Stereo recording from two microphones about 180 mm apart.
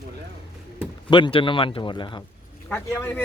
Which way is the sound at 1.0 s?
25° left (ahead or behind).